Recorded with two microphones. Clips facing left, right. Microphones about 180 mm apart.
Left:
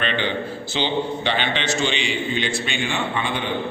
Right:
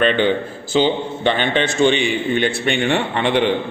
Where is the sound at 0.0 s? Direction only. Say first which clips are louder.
Right 8 dB; 45° right (ahead or behind).